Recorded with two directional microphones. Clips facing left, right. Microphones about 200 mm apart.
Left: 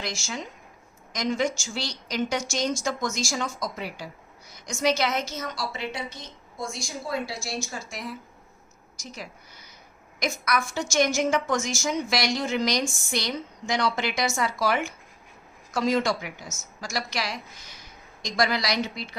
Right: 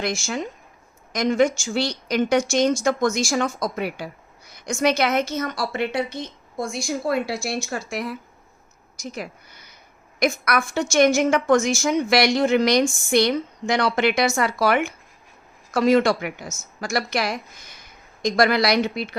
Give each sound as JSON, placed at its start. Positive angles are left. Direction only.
{"t": 0.0, "sound": "a woman's voice", "side_deg": -55}